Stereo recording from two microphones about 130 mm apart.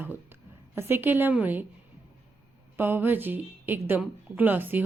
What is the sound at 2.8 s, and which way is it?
A woman's voice, 15° right (ahead or behind).